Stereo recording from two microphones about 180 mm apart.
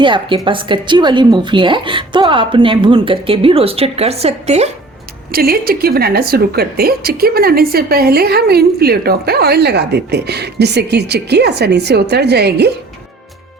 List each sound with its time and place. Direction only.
0.0 s a woman's voice: 25° right (ahead or behind)
5.3 s a woman's voice: 55° right (ahead or behind)